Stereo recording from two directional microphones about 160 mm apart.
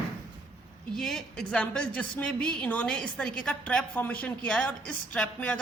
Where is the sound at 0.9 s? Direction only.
Centre (ahead or behind).